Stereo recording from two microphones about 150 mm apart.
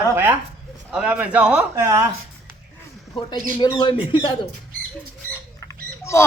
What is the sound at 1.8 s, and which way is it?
Speech, 20° right (ahead or behind).